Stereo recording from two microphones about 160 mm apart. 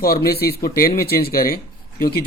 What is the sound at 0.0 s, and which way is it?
Speech, 75° left (ahead or behind).